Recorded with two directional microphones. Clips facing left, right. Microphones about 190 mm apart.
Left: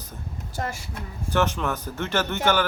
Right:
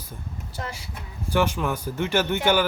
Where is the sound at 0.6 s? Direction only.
45° left (ahead or behind).